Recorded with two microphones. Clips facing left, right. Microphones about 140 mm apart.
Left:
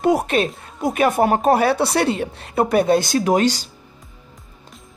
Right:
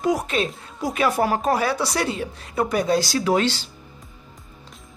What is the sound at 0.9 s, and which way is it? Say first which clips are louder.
A woman's voice: left 4 dB; 50° left (ahead or behind).